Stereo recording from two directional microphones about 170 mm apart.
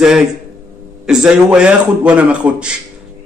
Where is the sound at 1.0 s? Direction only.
5° right (ahead or behind).